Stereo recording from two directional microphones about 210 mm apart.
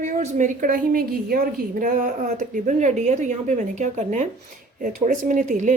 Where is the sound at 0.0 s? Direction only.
35° right (ahead or behind).